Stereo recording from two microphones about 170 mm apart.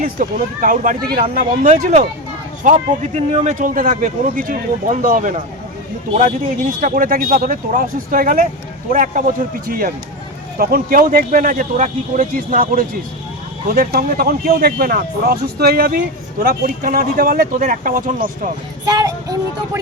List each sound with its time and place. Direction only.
0.0 s a man's voice: 55° right (ahead or behind)
18.9 s vehicle: 20° right (ahead or behind)